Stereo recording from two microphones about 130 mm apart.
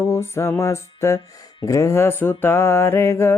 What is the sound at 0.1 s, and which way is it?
Music, 20° left (ahead or behind).